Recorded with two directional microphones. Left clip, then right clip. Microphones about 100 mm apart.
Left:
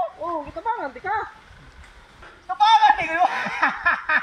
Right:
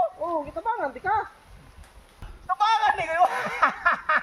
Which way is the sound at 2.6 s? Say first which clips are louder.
Left 7 dB; 25° right (ahead or behind).